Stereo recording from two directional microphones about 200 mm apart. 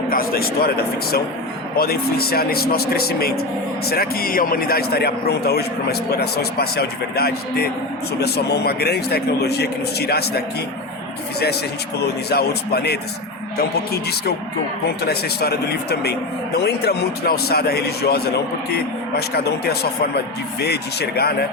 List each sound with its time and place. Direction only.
0.1 s a man's voice: 45° left (ahead or behind)
1.7 s speech: 50° left (ahead or behind)
12.3 s speech: 55° left (ahead or behind)